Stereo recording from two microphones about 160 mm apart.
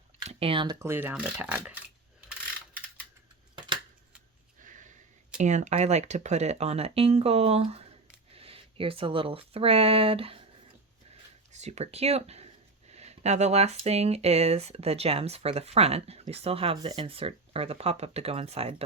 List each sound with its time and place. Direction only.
0.3 s speech: 35° right (ahead or behind)
0.8 s speech: 15° right (ahead or behind)
4.6 s sniff: 50° right (ahead or behind)
5.4 s speech: 45° right (ahead or behind)
11.5 s speech: 45° right (ahead or behind)